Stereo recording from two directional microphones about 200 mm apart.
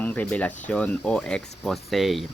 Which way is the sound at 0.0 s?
10° left (ahead or behind).